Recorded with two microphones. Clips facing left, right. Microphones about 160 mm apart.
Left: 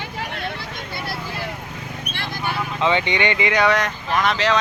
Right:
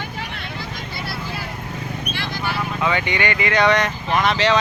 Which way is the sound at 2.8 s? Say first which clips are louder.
Left 2 dB; 20° left (ahead or behind).